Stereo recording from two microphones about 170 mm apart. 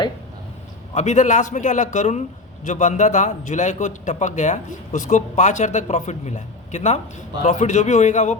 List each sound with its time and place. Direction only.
0.9 s a man's voice: 45° left (ahead or behind)